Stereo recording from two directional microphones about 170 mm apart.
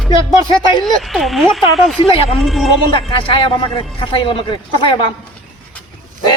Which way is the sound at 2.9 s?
30° left (ahead or behind).